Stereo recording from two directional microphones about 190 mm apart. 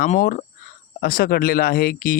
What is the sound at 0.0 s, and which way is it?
Speech, 50° left (ahead or behind).